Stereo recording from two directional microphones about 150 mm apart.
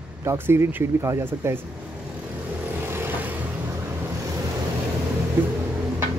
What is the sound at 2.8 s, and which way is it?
Vehicle, 15° right (ahead or behind).